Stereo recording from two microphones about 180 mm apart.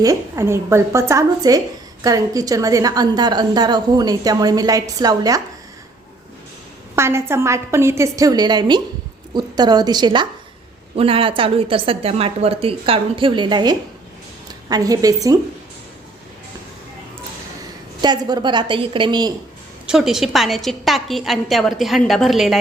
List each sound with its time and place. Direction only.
0.0 s a woman's voice: 15° right (ahead or behind)
6.9 s a woman's voice: 15° right (ahead or behind)
18.0 s a woman's voice: 25° right (ahead or behind)
19.9 s a woman's voice: centre (ahead or behind)